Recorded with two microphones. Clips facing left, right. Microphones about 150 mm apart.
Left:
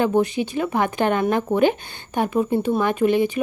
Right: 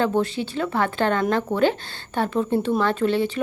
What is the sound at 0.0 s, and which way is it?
A woman's voice, 15° left (ahead or behind).